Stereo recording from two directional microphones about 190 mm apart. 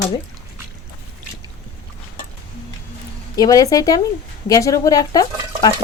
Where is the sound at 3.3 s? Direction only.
20° left (ahead or behind).